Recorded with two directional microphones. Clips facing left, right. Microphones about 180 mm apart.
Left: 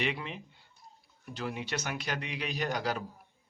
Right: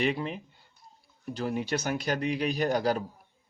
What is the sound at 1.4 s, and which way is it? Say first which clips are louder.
Speech: right 6 dB; 35° right (ahead or behind).